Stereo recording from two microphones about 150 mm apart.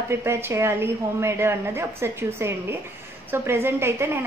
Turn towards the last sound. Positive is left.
turn(degrees=-15)  # may be behind; listen again after turning